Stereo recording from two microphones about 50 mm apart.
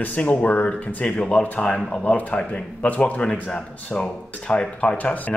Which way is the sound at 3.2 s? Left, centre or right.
Centre.